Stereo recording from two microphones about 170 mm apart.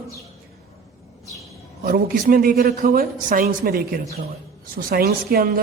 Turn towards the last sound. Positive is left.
turn(degrees=-60)  # may be behind; listen again after turning